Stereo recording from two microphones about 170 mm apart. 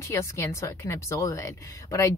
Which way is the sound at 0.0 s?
15° left (ahead or behind).